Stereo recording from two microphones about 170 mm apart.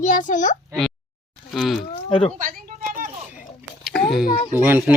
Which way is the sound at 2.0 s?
30° left (ahead or behind).